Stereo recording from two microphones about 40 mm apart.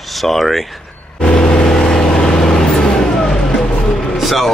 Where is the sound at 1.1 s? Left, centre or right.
Left.